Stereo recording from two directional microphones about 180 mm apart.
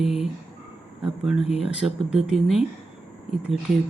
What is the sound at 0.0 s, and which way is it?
Speech, 5° right (ahead or behind).